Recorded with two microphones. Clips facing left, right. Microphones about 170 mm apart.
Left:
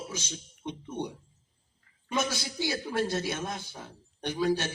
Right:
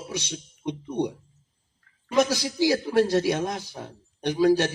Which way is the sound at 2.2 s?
80° right.